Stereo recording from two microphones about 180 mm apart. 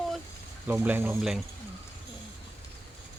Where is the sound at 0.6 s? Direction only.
10° right (ahead or behind).